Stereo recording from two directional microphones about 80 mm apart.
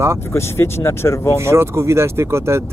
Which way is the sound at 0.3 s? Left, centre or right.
Left.